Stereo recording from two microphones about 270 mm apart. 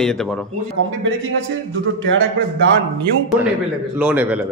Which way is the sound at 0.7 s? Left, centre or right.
Right.